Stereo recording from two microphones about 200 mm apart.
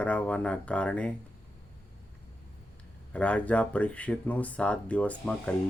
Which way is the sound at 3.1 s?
5° left (ahead or behind).